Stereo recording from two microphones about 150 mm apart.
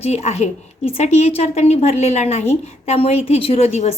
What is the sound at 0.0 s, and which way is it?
A woman's voice, 45° left (ahead or behind).